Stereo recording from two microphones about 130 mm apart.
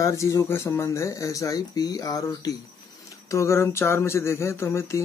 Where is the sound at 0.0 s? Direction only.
25° left (ahead or behind).